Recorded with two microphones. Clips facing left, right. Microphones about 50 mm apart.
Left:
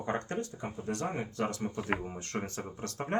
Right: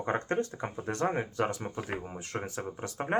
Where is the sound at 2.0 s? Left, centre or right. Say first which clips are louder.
Even; centre.